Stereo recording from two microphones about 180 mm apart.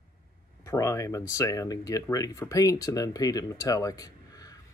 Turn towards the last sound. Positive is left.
turn(degrees=20)  # may be behind; listen again after turning